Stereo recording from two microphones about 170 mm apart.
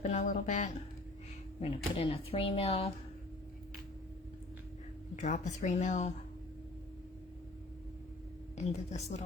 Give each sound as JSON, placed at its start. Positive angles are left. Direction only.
{"t": 0.0, "sound": "speech", "side_deg": 45}
{"t": 1.6, "sound": "speech", "side_deg": 35}
{"t": 5.1, "sound": "a woman's voice", "side_deg": 45}
{"t": 8.5, "sound": "speech", "side_deg": 40}